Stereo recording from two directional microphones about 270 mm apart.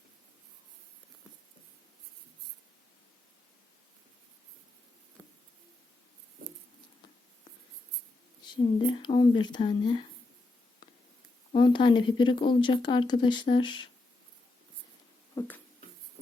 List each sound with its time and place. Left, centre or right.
8.4 s speech: centre
11.5 s speech: centre
15.4 s a sound: centre